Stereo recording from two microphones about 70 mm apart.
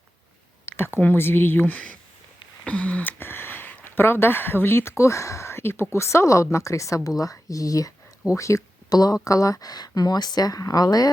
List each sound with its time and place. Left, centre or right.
0.6 s a sound: left
0.9 s speech: left
2.6 s a sound: centre; by 5.8 s left
5.9 s a woman's voice: left
8.9 s speech: left
9.2 s speech: left